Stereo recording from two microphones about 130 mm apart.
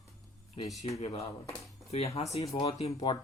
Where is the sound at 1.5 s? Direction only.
Centre (ahead or behind).